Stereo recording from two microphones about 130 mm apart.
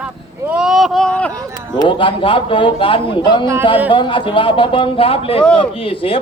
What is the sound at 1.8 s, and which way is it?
A man's voice, 40° left (ahead or behind).